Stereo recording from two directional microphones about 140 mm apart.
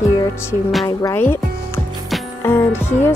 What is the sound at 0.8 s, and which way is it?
Speech, 20° left (ahead or behind).